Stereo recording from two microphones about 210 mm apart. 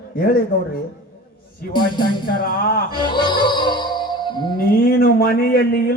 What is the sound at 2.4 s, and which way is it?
Speech, 45° left (ahead or behind).